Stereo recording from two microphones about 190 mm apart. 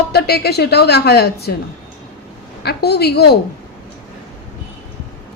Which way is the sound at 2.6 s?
60° left (ahead or behind).